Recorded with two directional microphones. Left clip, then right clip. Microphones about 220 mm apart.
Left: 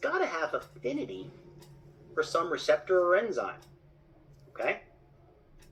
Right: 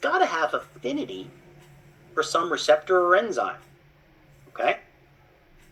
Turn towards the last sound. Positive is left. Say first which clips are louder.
# right 7 dB
turn(degrees=-25)  # may be behind; listen again after turning